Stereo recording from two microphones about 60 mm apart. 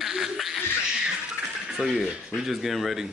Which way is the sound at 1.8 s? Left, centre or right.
Centre.